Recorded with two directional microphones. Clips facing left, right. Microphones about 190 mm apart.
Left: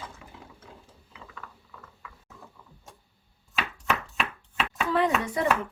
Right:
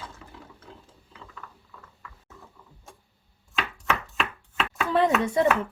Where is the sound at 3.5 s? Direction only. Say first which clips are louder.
Right 1 dB; 5° left (ahead or behind).